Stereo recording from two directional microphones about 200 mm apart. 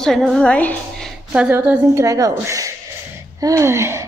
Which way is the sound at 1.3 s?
10° right (ahead or behind).